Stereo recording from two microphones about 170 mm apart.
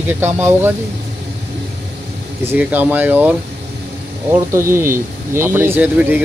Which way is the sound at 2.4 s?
10° right (ahead or behind).